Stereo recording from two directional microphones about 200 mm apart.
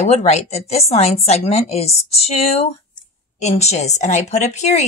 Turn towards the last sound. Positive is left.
turn(degrees=35)  # may be behind; listen again after turning